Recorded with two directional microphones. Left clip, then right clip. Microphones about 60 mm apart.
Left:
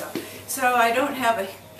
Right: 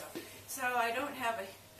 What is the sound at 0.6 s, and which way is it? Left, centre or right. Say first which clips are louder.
Speech: left 14 dB; centre.